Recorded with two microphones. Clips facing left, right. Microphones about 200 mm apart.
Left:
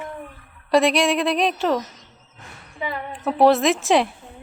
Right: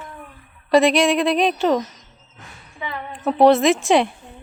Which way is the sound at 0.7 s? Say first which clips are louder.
Right 2 dB; centre (ahead or behind).